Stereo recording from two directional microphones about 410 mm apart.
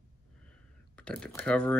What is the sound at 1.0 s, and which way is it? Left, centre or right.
Speech, centre.